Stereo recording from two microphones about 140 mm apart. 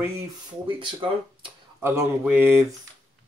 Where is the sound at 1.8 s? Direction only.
20° right (ahead or behind).